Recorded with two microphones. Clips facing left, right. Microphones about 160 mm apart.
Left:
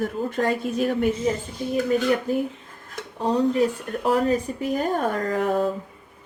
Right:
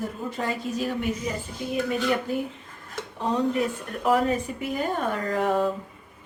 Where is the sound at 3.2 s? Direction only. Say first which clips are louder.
Left 4 dB; 35° left (ahead or behind).